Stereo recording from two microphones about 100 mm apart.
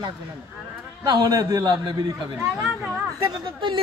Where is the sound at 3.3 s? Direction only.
55° right (ahead or behind).